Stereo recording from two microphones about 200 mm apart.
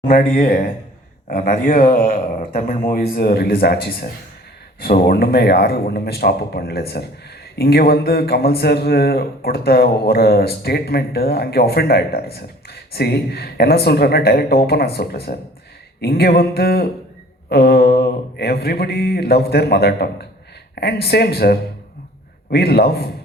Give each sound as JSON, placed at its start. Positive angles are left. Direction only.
{"t": 0.1, "sound": "a man's voice", "side_deg": 45}